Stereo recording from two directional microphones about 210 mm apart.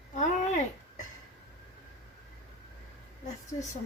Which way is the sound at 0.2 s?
35° left (ahead or behind).